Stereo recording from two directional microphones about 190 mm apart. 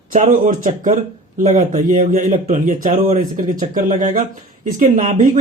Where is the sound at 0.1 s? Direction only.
40° right (ahead or behind).